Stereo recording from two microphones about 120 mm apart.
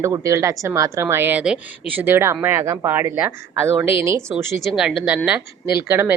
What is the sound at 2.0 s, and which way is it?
A woman's voice, 20° right (ahead or behind).